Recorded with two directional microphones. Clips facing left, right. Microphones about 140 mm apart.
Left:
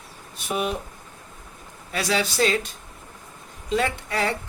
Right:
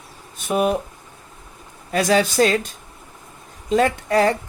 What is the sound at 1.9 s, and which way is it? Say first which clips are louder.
Speech: right 7 dB; 45° right (ahead or behind).